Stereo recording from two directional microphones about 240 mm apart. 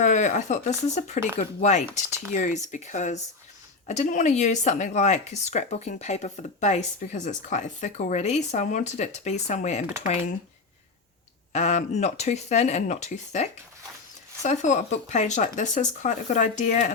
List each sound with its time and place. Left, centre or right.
0.0 s speech: left
11.5 s speech: left